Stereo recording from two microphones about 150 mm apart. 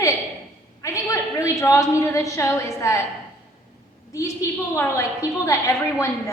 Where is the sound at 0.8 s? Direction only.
20° left (ahead or behind).